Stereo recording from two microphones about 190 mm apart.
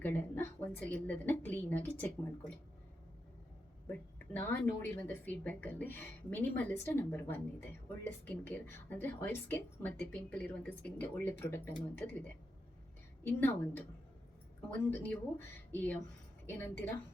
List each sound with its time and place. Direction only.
0.0 s speech: 10° left (ahead or behind)
3.8 s speech: 10° left (ahead or behind)
13.2 s speech: 10° left (ahead or behind)